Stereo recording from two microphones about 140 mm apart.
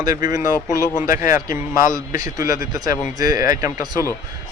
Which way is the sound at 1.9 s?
25° right (ahead or behind).